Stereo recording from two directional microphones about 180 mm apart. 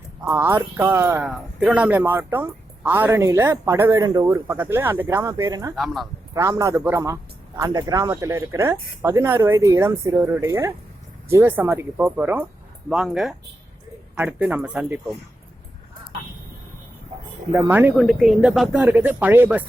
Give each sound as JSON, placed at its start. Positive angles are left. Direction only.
{"t": 0.3, "sound": "speech", "side_deg": -15}
{"t": 1.3, "sound": "speech", "side_deg": -5}
{"t": 5.7, "sound": "speech", "side_deg": 0}
{"t": 6.3, "sound": "speech", "side_deg": -15}
{"t": 17.5, "sound": "speech", "side_deg": -10}